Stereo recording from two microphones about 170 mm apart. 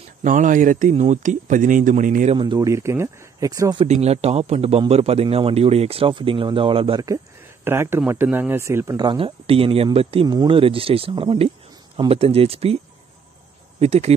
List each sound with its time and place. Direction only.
0.2 s speech: 50° right (ahead or behind)
2.3 s speech: 25° right (ahead or behind)
3.8 s a man's voice: 40° right (ahead or behind)
7.6 s a man's voice: 15° right (ahead or behind); by 12.7 s 35° right (ahead or behind)
13.7 s speech: 35° right (ahead or behind)